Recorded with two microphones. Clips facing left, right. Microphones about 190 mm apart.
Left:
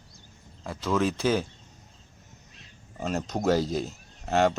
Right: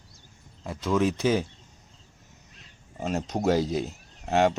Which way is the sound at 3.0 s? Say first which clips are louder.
Right 1 dB; 10° right (ahead or behind).